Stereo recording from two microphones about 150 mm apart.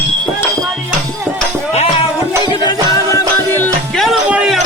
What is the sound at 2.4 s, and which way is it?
Music, 30° left (ahead or behind).